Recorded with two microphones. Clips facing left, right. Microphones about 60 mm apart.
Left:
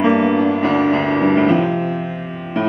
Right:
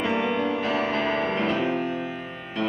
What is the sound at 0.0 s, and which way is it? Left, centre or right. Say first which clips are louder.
Music: left 10 dB; left.